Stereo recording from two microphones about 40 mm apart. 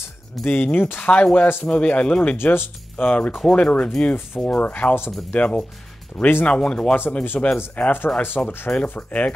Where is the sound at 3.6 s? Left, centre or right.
Left.